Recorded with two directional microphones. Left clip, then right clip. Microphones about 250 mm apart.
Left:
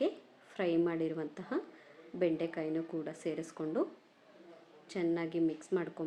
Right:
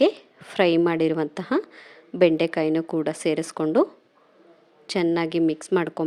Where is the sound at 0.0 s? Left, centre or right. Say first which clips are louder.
Right 15 dB; right.